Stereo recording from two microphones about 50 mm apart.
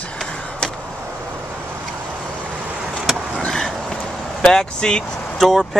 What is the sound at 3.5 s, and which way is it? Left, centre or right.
Dog, centre.